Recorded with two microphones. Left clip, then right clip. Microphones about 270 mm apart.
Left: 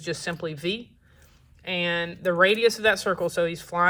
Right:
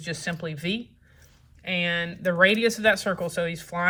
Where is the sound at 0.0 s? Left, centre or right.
Left.